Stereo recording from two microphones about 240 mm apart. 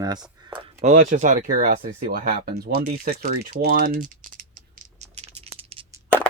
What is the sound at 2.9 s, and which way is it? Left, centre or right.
Rattle, right.